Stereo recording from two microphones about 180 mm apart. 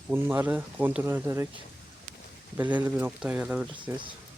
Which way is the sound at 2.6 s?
10° right (ahead or behind).